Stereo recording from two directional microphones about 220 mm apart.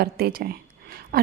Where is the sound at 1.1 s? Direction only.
45° right (ahead or behind).